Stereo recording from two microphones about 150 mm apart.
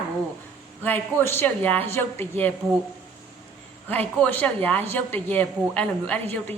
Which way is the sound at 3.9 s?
10° left (ahead or behind).